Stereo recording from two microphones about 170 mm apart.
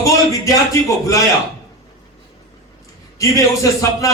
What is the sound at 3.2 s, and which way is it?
Speech, 20° left (ahead or behind).